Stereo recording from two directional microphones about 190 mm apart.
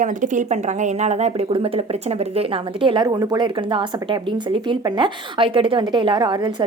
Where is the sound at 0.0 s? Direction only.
40° right (ahead or behind).